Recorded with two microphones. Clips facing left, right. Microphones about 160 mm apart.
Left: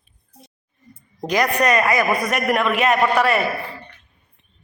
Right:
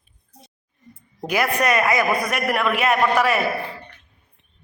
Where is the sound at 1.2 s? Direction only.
10° right (ahead or behind).